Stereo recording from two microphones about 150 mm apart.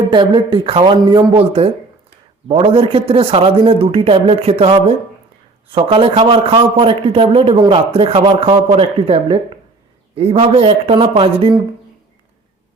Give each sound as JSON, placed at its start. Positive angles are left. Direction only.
{"t": 0.1, "sound": "a man's voice", "side_deg": -35}
{"t": 1.3, "sound": "a man's voice", "side_deg": -40}